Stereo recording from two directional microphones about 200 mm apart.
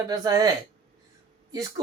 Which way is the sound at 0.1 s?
15° right (ahead or behind).